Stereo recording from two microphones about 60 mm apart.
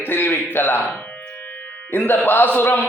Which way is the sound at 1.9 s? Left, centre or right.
Left.